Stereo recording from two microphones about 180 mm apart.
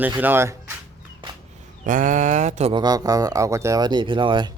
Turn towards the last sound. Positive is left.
turn(degrees=-25)  # may be behind; listen again after turning